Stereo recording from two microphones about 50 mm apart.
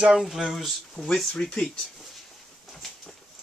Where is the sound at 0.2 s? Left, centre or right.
Centre.